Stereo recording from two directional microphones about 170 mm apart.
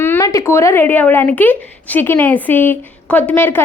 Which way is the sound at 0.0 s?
15° left (ahead or behind).